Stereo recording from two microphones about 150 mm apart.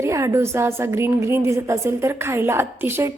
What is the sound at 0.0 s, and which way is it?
A woman's voice, 20° right (ahead or behind).